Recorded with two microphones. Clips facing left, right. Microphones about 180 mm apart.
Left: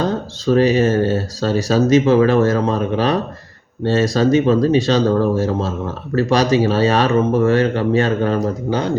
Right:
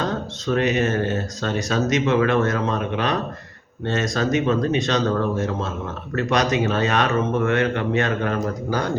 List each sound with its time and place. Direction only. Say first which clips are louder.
0.0 s speech: left 5 dB; 30° left (ahead or behind)